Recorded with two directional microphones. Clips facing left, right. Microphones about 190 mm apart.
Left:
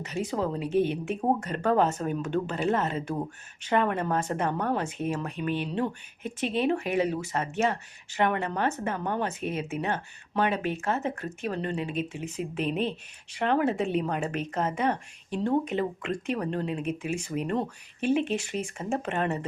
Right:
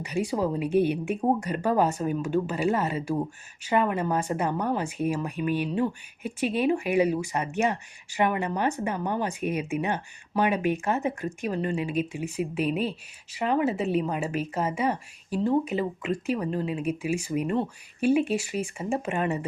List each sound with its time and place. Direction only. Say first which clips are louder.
0.0 s speech: right 3 dB; 10° right (ahead or behind)